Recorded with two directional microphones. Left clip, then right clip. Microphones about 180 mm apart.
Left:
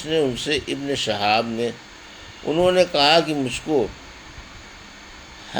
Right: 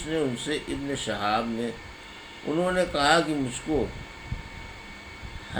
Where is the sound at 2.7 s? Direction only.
40° left (ahead or behind).